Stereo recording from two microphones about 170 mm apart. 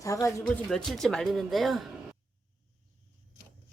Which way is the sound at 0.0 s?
20° left (ahead or behind).